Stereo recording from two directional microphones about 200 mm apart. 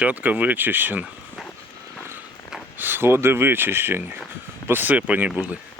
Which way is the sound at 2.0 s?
5° right (ahead or behind).